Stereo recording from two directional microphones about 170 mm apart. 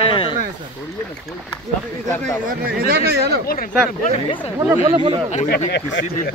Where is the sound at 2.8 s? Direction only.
70° right (ahead or behind).